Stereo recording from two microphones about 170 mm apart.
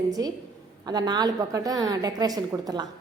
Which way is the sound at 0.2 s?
20° right (ahead or behind).